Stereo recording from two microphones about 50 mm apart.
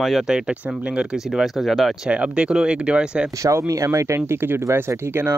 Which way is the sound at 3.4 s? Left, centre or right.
Right.